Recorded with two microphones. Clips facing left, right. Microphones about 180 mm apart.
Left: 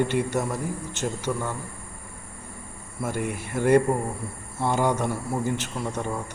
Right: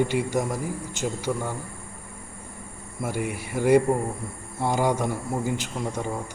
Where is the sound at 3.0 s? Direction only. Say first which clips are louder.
Even; 10° right (ahead or behind).